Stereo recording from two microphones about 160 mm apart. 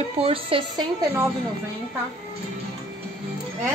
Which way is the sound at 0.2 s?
35° right (ahead or behind).